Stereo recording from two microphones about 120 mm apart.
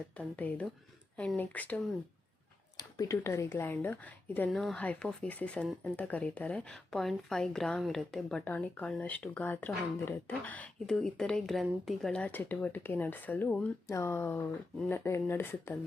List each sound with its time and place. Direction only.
0.2 s a woman's voice: 10° left (ahead or behind)
2.7 s speech: 30° left (ahead or behind)
4.5 s a woman's voice: 5° left (ahead or behind)
13.8 s speech: 25° left (ahead or behind)